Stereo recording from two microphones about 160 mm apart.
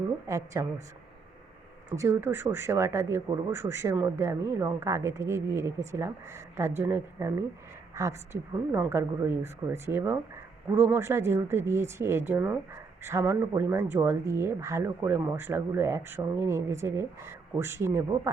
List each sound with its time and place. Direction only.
0.3 s a woman's voice: 20° right (ahead or behind)
2.0 s speech: 15° right (ahead or behind)